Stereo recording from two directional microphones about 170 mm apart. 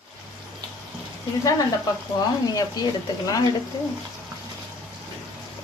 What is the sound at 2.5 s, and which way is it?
Speech, 25° left (ahead or behind).